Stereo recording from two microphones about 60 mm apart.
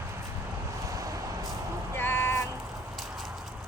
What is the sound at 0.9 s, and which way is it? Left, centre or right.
Vehicle, right.